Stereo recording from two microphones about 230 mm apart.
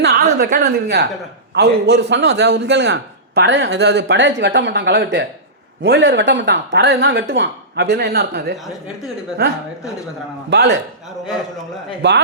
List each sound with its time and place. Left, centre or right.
0.0 s a woman's voice: right
12.0 s a man's voice: right